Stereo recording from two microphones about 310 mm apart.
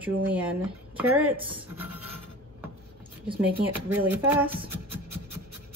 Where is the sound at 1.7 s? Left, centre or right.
Centre.